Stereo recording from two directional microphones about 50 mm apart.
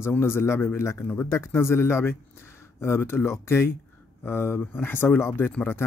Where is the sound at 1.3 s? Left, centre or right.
Left.